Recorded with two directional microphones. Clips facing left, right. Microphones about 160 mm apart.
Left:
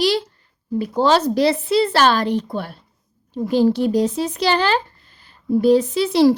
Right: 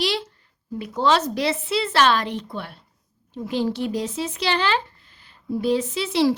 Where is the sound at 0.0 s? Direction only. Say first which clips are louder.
Left 6 dB; 40° left (ahead or behind).